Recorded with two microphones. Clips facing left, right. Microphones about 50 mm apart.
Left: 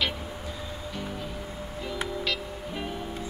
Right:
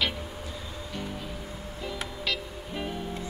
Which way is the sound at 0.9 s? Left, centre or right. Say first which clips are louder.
Even; centre.